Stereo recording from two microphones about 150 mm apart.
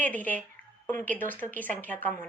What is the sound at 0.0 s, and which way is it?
Speech, 10° left (ahead or behind).